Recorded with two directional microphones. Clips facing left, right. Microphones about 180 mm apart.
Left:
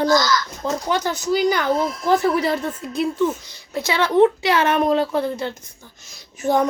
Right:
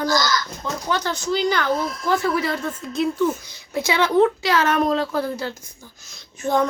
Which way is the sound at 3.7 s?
15° right (ahead or behind).